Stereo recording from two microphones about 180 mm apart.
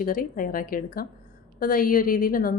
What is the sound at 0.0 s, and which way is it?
A woman's voice, 50° left (ahead or behind).